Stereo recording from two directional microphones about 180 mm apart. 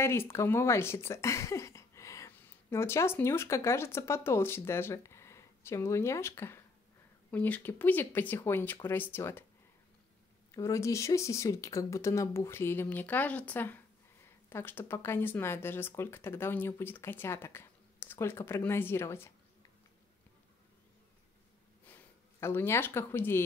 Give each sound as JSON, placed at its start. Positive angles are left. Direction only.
{"t": 0.0, "sound": "speech", "side_deg": 15}
{"t": 10.5, "sound": "speech", "side_deg": 15}
{"t": 21.8, "sound": "speech", "side_deg": 10}